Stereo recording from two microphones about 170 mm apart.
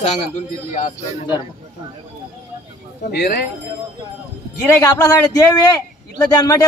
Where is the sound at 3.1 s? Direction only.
70° left (ahead or behind).